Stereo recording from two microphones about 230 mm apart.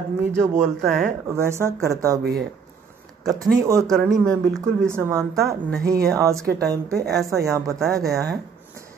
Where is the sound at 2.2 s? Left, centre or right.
Right.